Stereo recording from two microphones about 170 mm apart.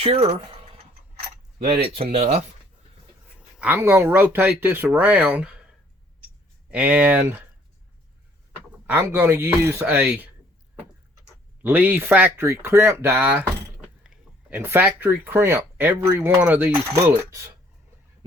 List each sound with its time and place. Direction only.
0.0 s speech: 35° right (ahead or behind)
3.6 s speech: 10° right (ahead or behind)
6.7 s speech: 10° right (ahead or behind)
8.9 s speech: 10° right (ahead or behind)
11.6 s speech: 10° right (ahead or behind)